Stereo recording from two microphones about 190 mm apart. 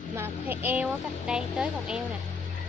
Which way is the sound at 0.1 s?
10° right (ahead or behind).